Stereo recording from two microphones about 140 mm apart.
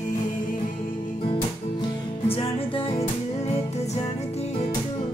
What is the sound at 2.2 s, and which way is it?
Music, 40° left (ahead or behind).